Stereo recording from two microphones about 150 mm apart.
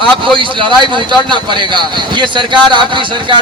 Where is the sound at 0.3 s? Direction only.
35° right (ahead or behind).